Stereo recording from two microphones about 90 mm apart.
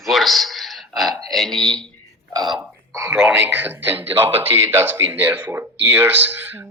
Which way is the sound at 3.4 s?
20° right (ahead or behind).